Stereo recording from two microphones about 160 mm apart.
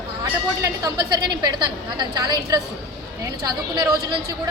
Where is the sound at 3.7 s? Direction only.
25° right (ahead or behind).